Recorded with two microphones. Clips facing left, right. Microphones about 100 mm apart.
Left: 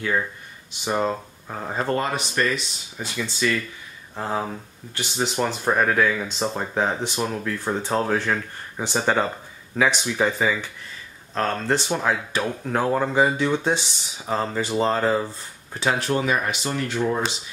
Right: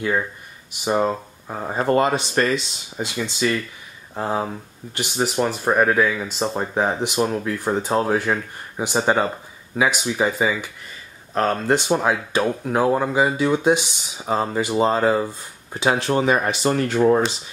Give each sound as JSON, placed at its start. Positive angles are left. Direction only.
{"t": 0.0, "sound": "speech", "side_deg": -10}
{"t": 2.5, "sound": "speech", "side_deg": -25}
{"t": 4.1, "sound": "speech", "side_deg": -15}
{"t": 16.0, "sound": "speech", "side_deg": -25}
{"t": 16.6, "sound": "speech", "side_deg": -45}